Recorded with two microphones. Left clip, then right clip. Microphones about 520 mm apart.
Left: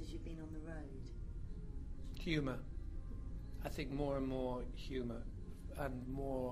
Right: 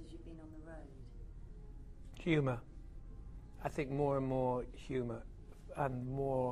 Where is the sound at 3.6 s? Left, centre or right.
Right.